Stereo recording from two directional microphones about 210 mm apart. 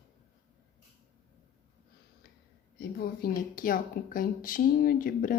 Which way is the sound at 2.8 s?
45° left (ahead or behind).